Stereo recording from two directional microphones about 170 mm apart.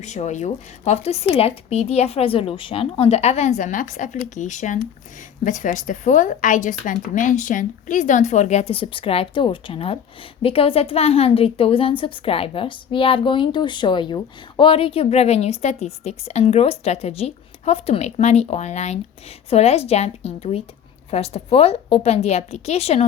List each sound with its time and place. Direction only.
0.0 s a woman's voice: 45° left (ahead or behind)